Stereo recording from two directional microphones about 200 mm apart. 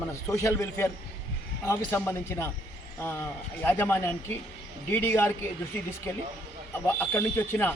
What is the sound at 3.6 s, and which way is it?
Speech, 10° left (ahead or behind).